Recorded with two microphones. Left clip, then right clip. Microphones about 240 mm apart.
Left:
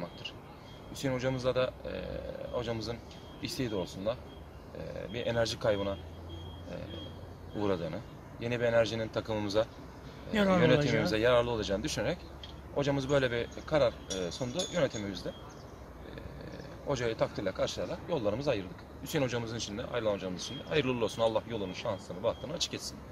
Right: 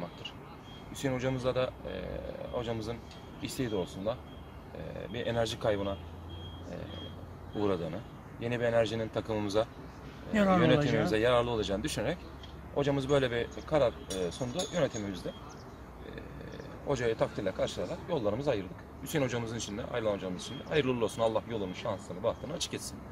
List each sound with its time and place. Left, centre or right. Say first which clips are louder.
0.9 s speech: even; centre
7.5 s speech: right 1 dB; centre
10.3 s a man's voice: right 1 dB; left
10.9 s speech: even; centre
16.8 s speech: right 1 dB; centre